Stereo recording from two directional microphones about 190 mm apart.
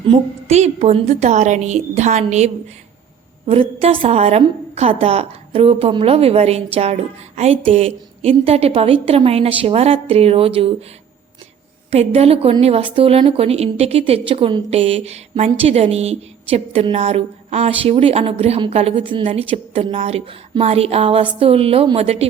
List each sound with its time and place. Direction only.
0.1 s a woman's voice: 35° right (ahead or behind)
11.9 s a woman's voice: 35° right (ahead or behind)